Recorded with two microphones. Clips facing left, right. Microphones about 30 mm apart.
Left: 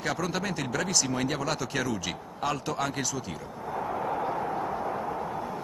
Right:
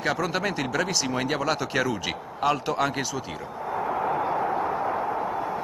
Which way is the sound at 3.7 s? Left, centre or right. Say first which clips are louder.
Right 4 dB; right.